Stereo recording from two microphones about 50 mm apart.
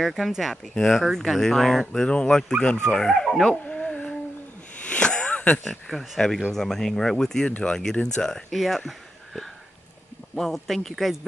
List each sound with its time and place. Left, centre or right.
0.0 s speech: centre
3.6 s a sound: centre
5.6 s speech: centre
7.4 s speech: left; by 11.1 s centre